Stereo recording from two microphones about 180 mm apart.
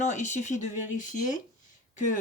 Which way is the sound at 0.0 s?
40° left (ahead or behind).